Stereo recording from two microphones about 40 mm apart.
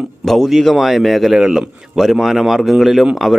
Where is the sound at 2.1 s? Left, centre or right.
Centre.